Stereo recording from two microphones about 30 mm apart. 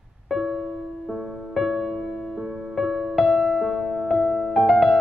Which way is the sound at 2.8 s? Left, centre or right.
Centre.